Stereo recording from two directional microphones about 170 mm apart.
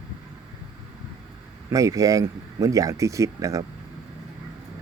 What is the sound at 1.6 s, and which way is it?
Speech, 20° right (ahead or behind).